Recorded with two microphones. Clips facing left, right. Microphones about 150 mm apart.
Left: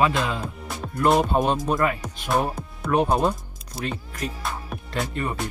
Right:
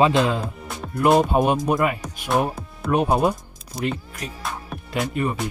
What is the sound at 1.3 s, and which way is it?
Speech, 10° right (ahead or behind).